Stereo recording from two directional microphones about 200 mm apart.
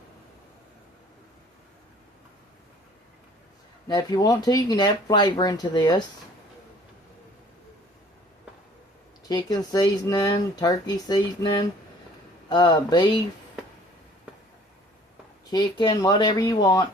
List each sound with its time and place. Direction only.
3.8 s speech: 20° left (ahead or behind)
9.3 s speech: 20° left (ahead or behind)
15.4 s speech: 20° left (ahead or behind)